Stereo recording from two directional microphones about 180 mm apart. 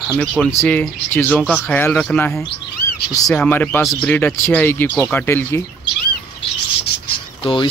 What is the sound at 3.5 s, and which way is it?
Speech, 10° left (ahead or behind).